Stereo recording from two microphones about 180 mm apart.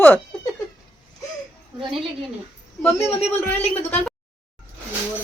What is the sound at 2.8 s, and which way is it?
A woman's voice, 5° left (ahead or behind).